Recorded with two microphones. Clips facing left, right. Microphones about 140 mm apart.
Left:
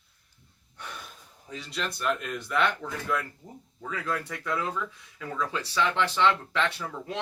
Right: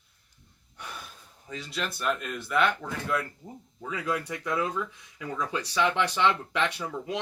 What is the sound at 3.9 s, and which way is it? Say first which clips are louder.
Speech: right 2 dB; 15° right (ahead or behind).